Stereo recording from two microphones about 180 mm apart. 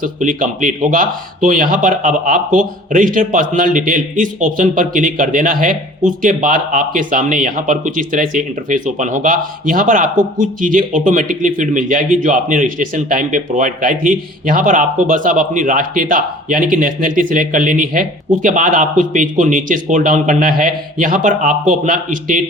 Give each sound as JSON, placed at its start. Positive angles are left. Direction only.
{"t": 0.0, "sound": "a man's voice", "side_deg": -45}